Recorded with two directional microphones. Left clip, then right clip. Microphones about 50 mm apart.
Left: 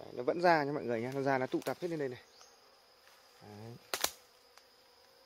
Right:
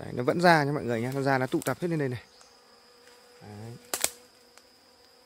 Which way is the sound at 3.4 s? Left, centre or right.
Right.